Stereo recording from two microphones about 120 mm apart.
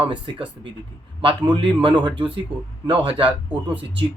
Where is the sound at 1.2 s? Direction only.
40° right (ahead or behind).